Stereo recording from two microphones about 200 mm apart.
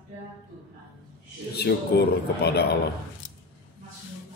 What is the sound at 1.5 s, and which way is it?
A man's voice, 55° left (ahead or behind).